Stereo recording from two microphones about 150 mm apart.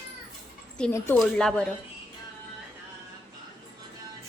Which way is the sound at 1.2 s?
5° left (ahead or behind).